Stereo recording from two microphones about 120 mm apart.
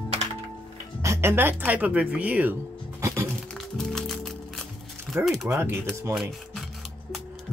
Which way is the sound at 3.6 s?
5° left (ahead or behind).